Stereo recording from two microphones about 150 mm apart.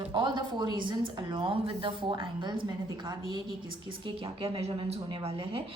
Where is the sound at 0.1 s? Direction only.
30° right (ahead or behind).